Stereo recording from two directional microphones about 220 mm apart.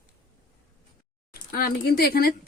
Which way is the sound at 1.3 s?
40° left (ahead or behind).